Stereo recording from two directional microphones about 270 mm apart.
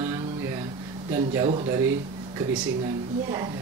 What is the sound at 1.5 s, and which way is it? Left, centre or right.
Speech, right.